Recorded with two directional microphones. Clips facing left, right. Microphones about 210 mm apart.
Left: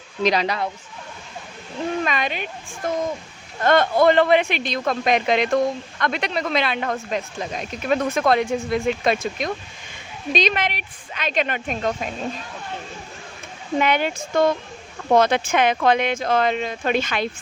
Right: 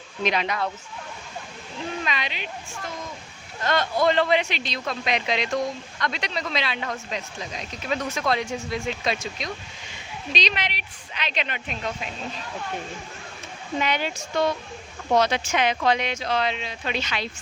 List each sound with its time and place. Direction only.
0.2 s speech: 35° left (ahead or behind)
2.0 s speech: 50° left (ahead or behind)
13.7 s speech: 55° left (ahead or behind)